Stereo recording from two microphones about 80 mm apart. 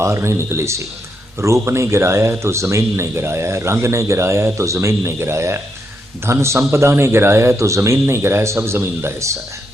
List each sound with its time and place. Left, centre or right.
0.0 s speech: right